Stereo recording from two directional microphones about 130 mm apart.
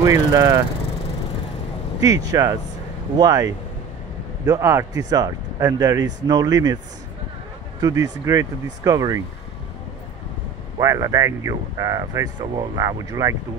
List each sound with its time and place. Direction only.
0.0 s speech: 25° right (ahead or behind)
2.0 s speech: 25° right (ahead or behind)
7.8 s speech: 25° right (ahead or behind)
10.8 s speech: 25° right (ahead or behind)